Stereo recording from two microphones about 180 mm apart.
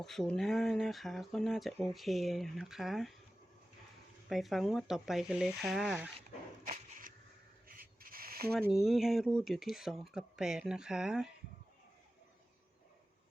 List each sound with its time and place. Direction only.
0.0 s speech: centre (ahead or behind)
4.3 s speech: centre (ahead or behind)
6.7 s a sound: 45° right (ahead or behind)
8.6 s speech: centre (ahead or behind)